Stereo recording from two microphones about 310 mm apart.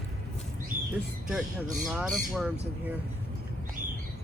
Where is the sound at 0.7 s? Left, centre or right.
Right.